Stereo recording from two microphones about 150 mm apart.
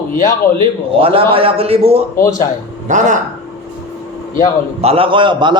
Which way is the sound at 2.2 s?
20° left (ahead or behind).